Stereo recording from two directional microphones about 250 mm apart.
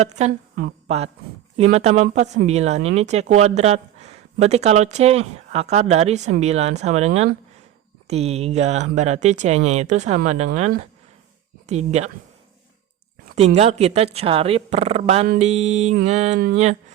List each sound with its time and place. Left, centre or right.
0.0 s a woman's voice: right
13.2 s a sound: right
13.6 s speech: right